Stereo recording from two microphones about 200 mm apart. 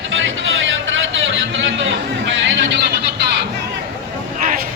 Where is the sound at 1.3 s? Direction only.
70° right (ahead or behind).